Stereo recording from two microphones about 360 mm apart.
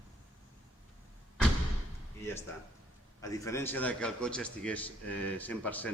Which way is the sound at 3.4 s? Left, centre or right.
Centre.